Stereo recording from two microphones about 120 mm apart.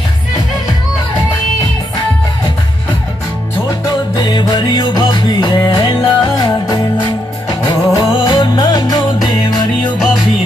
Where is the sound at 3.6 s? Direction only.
35° left (ahead or behind).